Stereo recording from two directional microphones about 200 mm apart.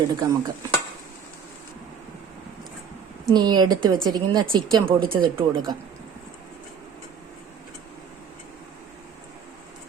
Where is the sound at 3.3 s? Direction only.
20° right (ahead or behind).